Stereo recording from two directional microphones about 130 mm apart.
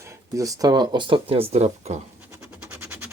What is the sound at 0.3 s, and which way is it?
Speech, 25° right (ahead or behind).